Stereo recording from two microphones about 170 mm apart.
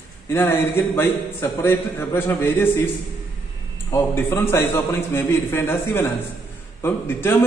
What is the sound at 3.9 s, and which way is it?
A man's voice, 15° left (ahead or behind).